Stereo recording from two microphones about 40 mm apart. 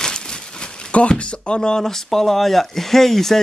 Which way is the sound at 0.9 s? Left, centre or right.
Left.